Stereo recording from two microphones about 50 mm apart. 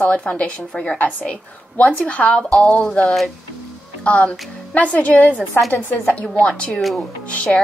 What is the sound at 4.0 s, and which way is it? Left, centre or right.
Speech, left.